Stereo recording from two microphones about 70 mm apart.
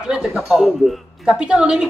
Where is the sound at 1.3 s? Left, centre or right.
Centre.